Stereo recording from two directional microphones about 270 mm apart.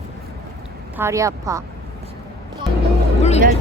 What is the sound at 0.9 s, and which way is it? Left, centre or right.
Speech, centre.